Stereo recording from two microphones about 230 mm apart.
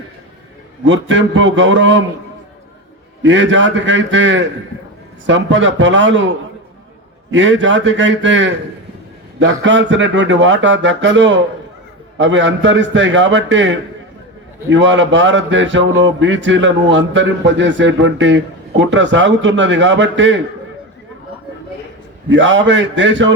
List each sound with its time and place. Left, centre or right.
0.9 s speech: right
3.2 s speech: right
7.3 s speech: right
22.4 s speech: right